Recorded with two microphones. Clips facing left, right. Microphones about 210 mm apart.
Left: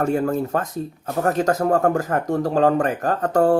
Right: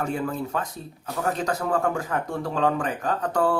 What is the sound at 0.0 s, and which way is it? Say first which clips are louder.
Speech: left 7 dB; 45° left (ahead or behind).